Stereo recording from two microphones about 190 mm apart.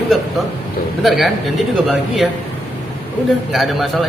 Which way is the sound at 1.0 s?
Centre (ahead or behind).